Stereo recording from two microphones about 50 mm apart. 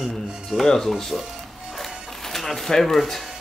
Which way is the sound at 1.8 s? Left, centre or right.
Centre.